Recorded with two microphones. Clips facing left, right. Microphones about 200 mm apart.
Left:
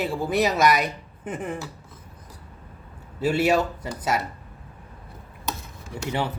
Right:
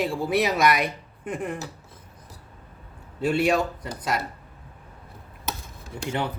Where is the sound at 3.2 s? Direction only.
5° left (ahead or behind).